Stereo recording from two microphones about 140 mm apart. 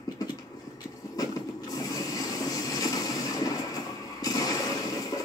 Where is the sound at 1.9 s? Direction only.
25° left (ahead or behind).